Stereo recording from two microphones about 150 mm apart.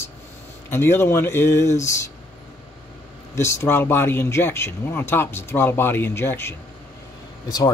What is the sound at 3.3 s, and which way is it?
Speech, 20° left (ahead or behind).